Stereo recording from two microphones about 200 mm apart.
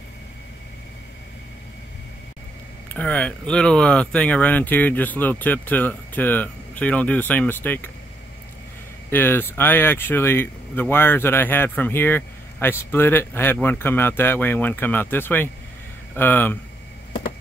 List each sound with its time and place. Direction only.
2.9 s speech: 5° left (ahead or behind)
9.1 s speech: 10° left (ahead or behind)